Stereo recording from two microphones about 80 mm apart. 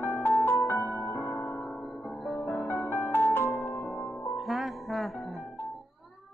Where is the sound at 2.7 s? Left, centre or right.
Left.